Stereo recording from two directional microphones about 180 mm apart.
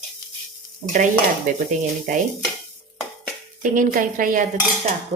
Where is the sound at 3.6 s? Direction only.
50° right (ahead or behind).